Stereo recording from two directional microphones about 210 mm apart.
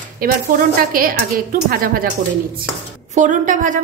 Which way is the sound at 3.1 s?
35° right (ahead or behind).